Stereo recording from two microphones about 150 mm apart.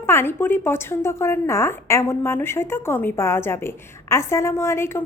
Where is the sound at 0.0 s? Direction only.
15° left (ahead or behind).